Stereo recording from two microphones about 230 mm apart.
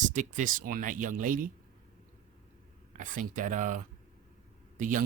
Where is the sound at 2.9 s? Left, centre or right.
Right.